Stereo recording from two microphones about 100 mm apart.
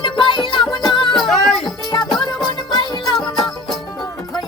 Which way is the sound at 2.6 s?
50° left (ahead or behind).